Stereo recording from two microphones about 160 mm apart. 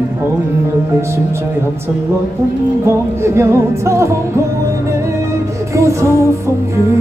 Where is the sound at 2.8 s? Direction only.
15° right (ahead or behind).